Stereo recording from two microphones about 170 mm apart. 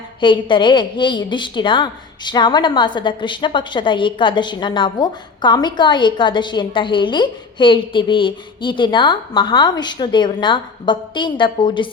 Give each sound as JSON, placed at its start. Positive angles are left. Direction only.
{"t": 0.2, "sound": "a woman's voice", "side_deg": 30}